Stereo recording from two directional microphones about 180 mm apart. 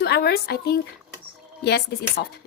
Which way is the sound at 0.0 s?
60° left (ahead or behind).